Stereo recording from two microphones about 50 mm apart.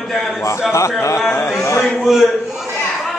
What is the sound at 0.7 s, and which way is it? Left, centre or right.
Speech, left.